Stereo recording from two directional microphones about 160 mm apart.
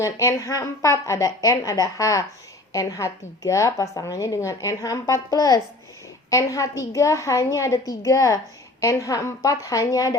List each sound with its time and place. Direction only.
0.0 s a woman's voice: 20° left (ahead or behind)